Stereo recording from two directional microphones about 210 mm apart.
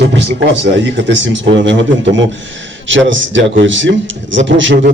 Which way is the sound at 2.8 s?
60° right (ahead or behind).